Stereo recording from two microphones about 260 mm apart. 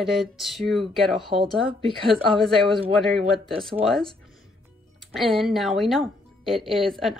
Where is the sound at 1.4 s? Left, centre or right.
Right.